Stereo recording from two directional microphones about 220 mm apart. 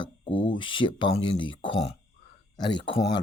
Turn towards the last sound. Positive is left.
turn(degrees=20)  # may be behind; listen again after turning